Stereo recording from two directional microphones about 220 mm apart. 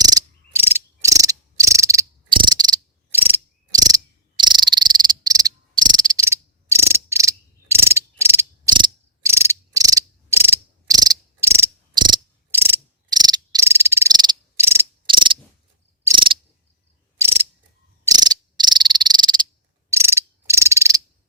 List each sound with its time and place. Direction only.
0.0 s cricket: 15° right (ahead or behind)
15.1 s a sound: 20° right (ahead or behind)
16.0 s cricket: 20° right (ahead or behind)
17.2 s mechanisms: 10° right (ahead or behind)
18.0 s frog: 15° right (ahead or behind)
19.9 s a sound: 10° right (ahead or behind)